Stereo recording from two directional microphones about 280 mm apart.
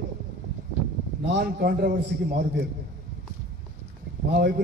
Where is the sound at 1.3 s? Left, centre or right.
Right.